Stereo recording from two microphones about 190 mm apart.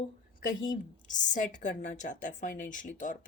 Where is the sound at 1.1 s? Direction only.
40° left (ahead or behind).